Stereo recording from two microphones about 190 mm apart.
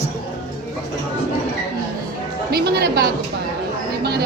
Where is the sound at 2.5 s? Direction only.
55° right (ahead or behind).